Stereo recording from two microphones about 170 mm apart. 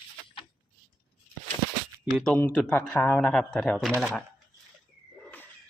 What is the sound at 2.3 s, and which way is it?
Speech, 5° left (ahead or behind).